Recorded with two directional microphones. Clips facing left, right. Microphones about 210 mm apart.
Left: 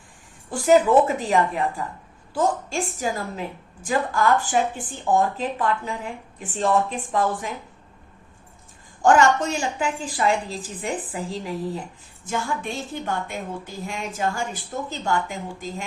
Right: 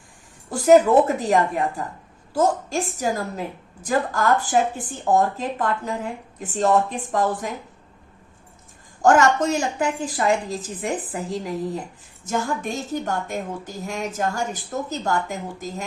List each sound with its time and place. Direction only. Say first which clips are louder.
0.5 s a woman's voice: right 2 dB; 40° right (ahead or behind)
9.0 s a woman's voice: right 1 dB; 40° right (ahead or behind)
12.2 s a woman's voice: right 2 dB; 45° right (ahead or behind)